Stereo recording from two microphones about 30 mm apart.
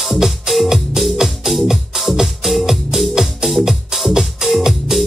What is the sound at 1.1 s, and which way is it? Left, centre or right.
Music, centre.